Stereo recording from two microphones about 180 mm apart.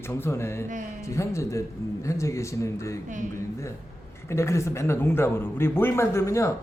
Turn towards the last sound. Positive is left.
turn(degrees=15)  # may be behind; listen again after turning